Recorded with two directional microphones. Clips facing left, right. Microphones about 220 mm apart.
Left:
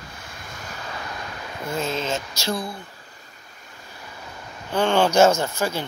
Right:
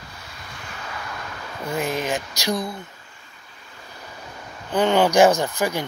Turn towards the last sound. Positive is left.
turn(degrees=-15)  # may be behind; listen again after turning